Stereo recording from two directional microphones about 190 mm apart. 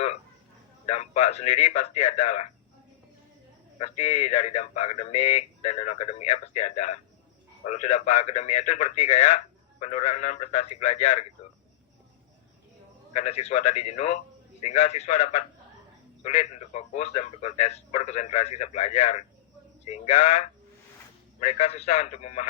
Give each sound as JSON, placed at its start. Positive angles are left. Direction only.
{"t": 0.9, "sound": "speech", "side_deg": 35}
{"t": 3.8, "sound": "speech", "side_deg": 35}
{"t": 13.1, "sound": "speech", "side_deg": 35}